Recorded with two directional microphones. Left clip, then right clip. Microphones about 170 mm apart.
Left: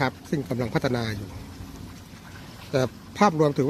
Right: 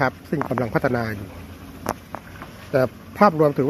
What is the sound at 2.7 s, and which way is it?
Speech, 10° left (ahead or behind).